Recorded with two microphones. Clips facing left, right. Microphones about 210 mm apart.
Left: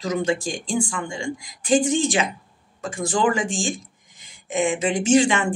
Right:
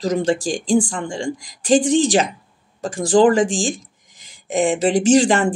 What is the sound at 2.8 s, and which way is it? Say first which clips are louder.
Speech: right 8 dB; 40° right (ahead or behind).